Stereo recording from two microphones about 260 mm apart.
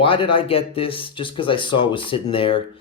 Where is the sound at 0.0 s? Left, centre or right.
Centre.